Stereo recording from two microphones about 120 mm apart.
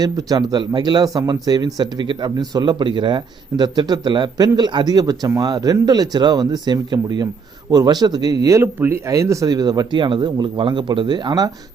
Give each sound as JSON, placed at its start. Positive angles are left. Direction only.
{"t": 0.0, "sound": "speech", "side_deg": -30}